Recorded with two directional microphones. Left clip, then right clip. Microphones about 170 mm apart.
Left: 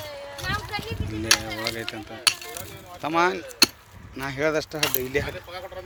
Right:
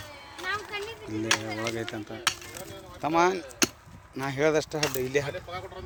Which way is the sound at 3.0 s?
10° right (ahead or behind).